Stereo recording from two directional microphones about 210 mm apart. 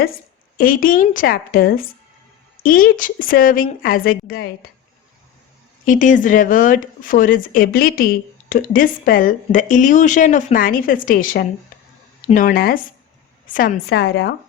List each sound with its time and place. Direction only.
0.5 s a woman's voice: 45° left (ahead or behind)
5.8 s a woman's voice: 40° left (ahead or behind)
13.9 s a woman's voice: 50° left (ahead or behind)